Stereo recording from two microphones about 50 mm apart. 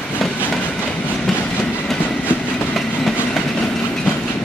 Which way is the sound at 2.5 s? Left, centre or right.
Centre.